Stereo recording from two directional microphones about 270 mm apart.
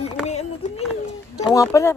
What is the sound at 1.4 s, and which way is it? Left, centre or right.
Speech, centre.